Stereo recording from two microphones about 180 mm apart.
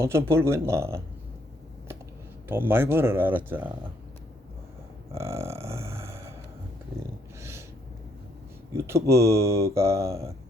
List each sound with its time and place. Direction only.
0.0 s speech: 15° right (ahead or behind)
2.5 s speech: 10° right (ahead or behind)
5.1 s a sound: 15° right (ahead or behind)
8.7 s speech: 15° right (ahead or behind)